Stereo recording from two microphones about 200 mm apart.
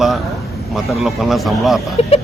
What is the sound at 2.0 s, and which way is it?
Speech, 30° left (ahead or behind).